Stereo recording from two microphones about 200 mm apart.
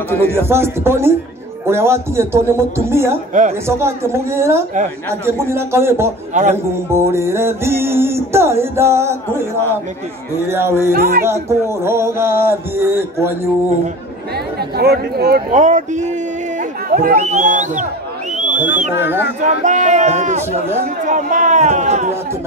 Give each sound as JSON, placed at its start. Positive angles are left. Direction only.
{"t": 0.3, "sound": "music", "side_deg": -10}
{"t": 10.5, "sound": "music", "side_deg": -10}
{"t": 10.9, "sound": "speech", "side_deg": -50}
{"t": 11.2, "sound": "music", "side_deg": -15}
{"t": 14.8, "sound": "speech", "side_deg": -55}
{"t": 15.5, "sound": "a man's voice", "side_deg": -35}
{"t": 18.4, "sound": "owl", "side_deg": -40}
{"t": 18.9, "sound": "music", "side_deg": -10}
{"t": 19.4, "sound": "a man's voice", "side_deg": -35}